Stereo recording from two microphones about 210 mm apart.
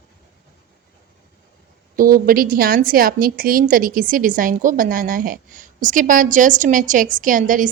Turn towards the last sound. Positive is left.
turn(degrees=-40)  # may be behind; listen again after turning